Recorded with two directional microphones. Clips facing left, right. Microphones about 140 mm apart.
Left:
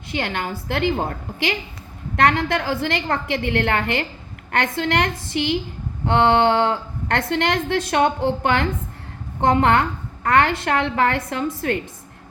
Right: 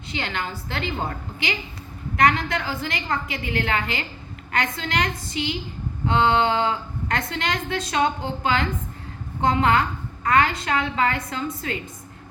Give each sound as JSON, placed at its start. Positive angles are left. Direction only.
{"t": 0.1, "sound": "a woman's voice", "side_deg": 60}